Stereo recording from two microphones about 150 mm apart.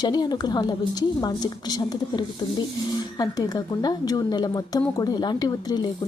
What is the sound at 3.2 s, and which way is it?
Speech, 25° left (ahead or behind).